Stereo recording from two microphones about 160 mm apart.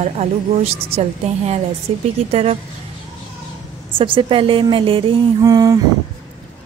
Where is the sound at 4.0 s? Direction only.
35° right (ahead or behind).